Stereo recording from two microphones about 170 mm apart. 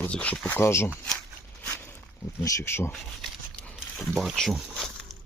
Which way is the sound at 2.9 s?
Centre (ahead or behind).